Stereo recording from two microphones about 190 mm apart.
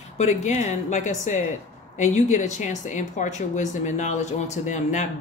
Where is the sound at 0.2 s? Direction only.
35° left (ahead or behind).